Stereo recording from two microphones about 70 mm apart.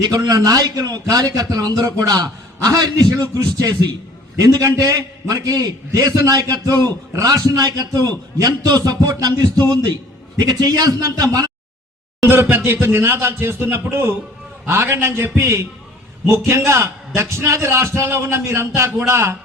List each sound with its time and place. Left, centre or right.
0.0 s a man's voice: right
12.2 s speech: right